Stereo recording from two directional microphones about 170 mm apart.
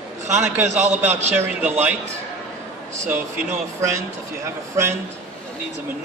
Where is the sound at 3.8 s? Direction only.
15° right (ahead or behind).